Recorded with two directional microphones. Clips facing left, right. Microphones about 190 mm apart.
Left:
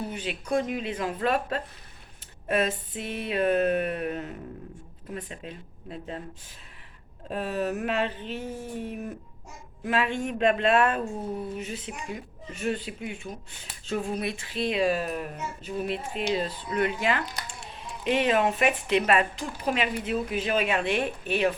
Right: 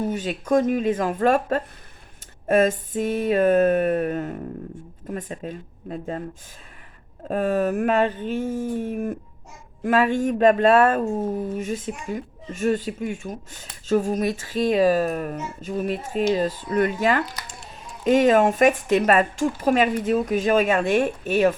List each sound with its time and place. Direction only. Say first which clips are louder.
0.0 s speech: right 7 dB; 45° right (ahead or behind)
7.3 s speech: right 7 dB; 50° right (ahead or behind)